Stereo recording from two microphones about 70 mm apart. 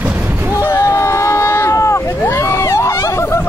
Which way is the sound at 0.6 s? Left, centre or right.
Left.